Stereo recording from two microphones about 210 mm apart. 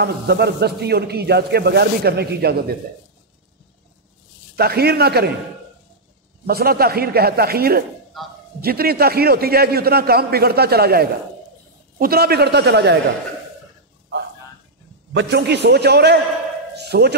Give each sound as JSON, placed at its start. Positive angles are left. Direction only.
{"t": 0.0, "sound": "a man's voice", "side_deg": -50}
{"t": 4.6, "sound": "a man's voice", "side_deg": -50}
{"t": 6.4, "sound": "a man's voice", "side_deg": -45}
{"t": 8.2, "sound": "speech", "side_deg": 0}
{"t": 8.5, "sound": "a man's voice", "side_deg": -45}
{"t": 15.1, "sound": "a man's voice", "side_deg": -55}
{"t": 16.7, "sound": "a sound", "side_deg": -50}